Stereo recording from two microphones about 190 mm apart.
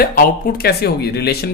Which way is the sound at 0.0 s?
50° left (ahead or behind).